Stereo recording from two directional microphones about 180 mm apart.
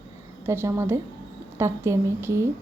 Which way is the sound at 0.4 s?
15° right (ahead or behind).